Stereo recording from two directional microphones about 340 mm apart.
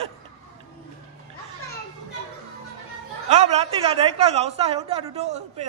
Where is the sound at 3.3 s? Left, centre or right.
Centre.